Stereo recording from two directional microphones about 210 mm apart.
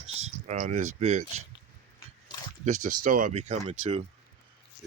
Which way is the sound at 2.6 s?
35° right (ahead or behind).